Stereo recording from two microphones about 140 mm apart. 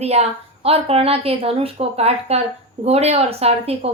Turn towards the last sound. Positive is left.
turn(degrees=-45)  # may be behind; listen again after turning